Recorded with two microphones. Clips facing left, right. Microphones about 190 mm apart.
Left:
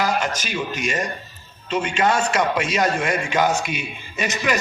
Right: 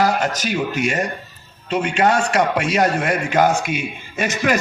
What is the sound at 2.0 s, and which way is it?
Speech, 35° right (ahead or behind).